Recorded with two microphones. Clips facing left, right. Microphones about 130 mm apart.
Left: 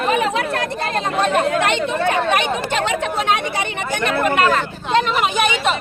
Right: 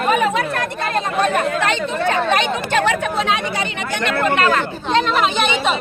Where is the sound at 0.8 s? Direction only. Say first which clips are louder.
Right 2 dB; 30° left (ahead or behind).